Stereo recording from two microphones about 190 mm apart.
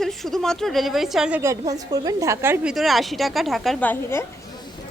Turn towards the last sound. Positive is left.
turn(degrees=10)  # may be behind; listen again after turning